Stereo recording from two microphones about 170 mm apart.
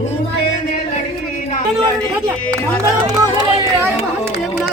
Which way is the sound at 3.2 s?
20° right (ahead or behind).